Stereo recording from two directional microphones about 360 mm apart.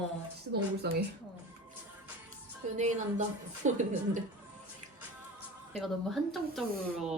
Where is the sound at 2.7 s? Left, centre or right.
Centre.